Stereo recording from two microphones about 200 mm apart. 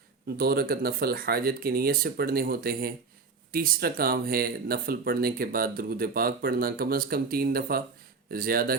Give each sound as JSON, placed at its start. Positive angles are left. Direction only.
{"t": 0.3, "sound": "speech", "side_deg": -50}